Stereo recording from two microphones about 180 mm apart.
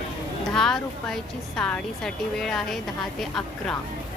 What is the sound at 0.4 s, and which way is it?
A woman's voice, centre (ahead or behind).